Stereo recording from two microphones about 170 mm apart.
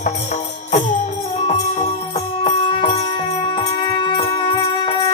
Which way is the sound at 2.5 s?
30° left (ahead or behind).